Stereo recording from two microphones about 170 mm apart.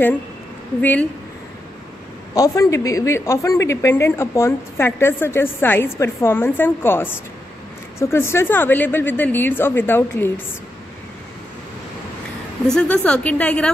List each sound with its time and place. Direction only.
0.7 s a woman's voice: 10° left (ahead or behind)
2.3 s a woman's voice: 20° left (ahead or behind)
12.6 s a woman's voice: 5° left (ahead or behind)